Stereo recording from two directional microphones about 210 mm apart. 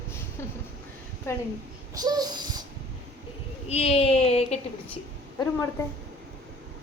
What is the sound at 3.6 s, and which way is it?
A child's voice, 30° left (ahead or behind).